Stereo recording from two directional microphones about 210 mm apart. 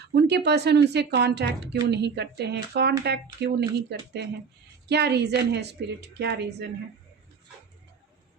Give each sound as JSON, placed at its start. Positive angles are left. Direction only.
{"t": 0.0, "sound": "a woman's voice", "side_deg": -50}